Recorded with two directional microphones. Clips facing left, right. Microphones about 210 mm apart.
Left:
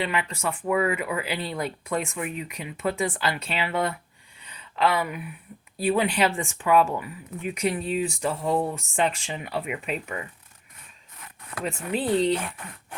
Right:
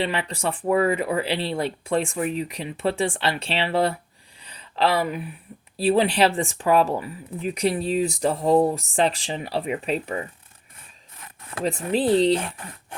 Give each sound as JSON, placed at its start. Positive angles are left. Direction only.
{"t": 0.0, "sound": "speech", "side_deg": -35}